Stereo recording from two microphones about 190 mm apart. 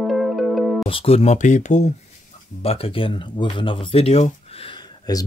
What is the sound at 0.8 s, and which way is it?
Speech, 30° left (ahead or behind).